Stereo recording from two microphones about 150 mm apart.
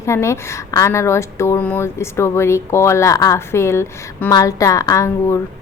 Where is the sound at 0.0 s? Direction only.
20° left (ahead or behind).